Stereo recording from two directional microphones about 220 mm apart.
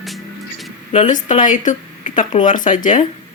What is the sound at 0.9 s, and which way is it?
Speech, 35° left (ahead or behind).